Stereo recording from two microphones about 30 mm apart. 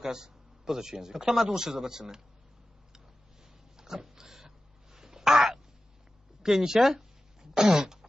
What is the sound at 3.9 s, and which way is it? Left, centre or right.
Dog, centre.